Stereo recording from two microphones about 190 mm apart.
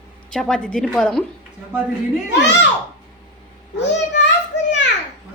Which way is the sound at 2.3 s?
65° left (ahead or behind).